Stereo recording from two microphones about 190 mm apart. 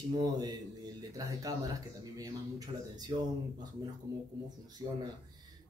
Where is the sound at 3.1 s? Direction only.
25° right (ahead or behind).